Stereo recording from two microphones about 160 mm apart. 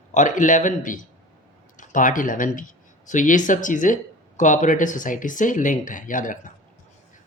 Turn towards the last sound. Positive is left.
turn(degrees=55)  # may be behind; listen again after turning